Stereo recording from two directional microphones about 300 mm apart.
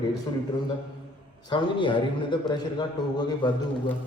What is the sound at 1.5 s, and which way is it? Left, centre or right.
A man's voice, centre.